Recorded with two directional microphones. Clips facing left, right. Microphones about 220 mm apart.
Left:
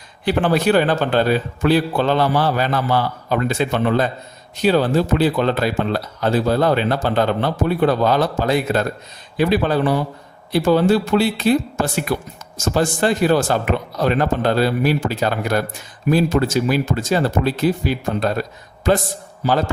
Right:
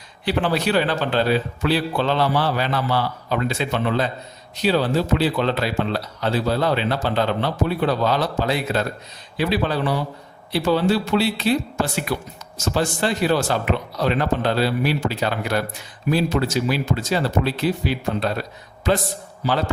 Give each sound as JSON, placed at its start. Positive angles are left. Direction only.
{"t": 0.3, "sound": "speech", "side_deg": 50}